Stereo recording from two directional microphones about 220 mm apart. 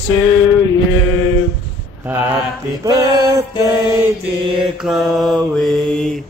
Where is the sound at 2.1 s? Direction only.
5° right (ahead or behind).